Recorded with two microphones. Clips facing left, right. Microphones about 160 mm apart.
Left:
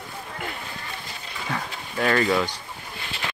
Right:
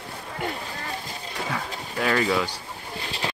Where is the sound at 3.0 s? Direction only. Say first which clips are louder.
Right 3 dB; 35° right (ahead or behind).